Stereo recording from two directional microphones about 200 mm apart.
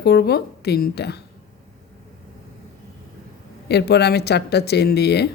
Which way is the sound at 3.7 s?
55° left (ahead or behind).